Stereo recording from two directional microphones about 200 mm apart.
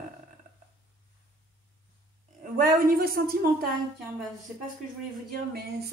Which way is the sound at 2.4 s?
45° right (ahead or behind).